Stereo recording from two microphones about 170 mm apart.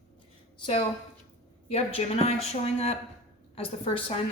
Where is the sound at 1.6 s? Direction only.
40° left (ahead or behind).